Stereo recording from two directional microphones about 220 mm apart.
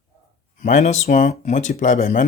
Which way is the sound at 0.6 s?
35° left (ahead or behind).